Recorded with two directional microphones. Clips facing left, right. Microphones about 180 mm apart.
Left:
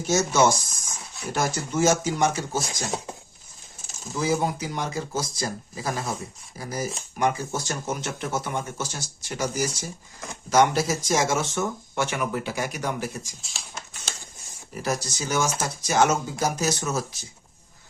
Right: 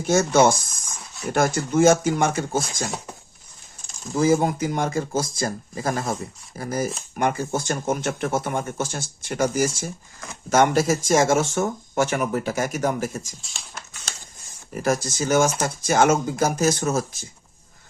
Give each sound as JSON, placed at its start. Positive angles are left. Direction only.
{"t": 0.1, "sound": "speech", "side_deg": -55}
{"t": 4.1, "sound": "speech", "side_deg": -45}
{"t": 13.4, "sound": "speech", "side_deg": 0}
{"t": 14.8, "sound": "speech", "side_deg": -50}